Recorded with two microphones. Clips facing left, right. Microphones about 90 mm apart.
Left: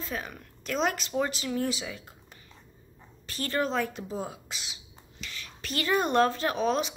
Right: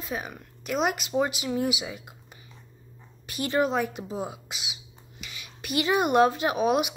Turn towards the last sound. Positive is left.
turn(degrees=-10)  # may be behind; listen again after turning